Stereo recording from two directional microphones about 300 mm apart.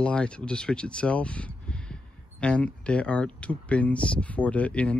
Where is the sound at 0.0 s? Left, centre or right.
Centre.